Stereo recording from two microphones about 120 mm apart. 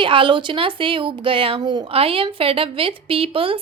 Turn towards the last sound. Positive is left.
turn(degrees=-50)  # may be behind; listen again after turning